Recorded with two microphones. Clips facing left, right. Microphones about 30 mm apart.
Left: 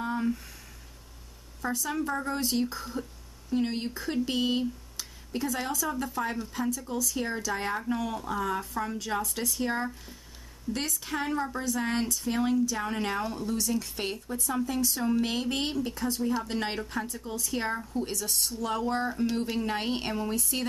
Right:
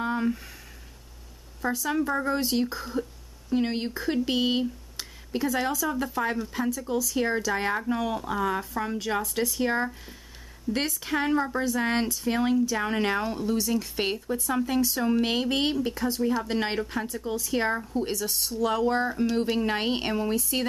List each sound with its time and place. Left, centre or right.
0.0 s a sound: right
1.9 s speech: centre
10.7 s a woman's voice: centre
11.1 s speech: right
18.3 s speech: centre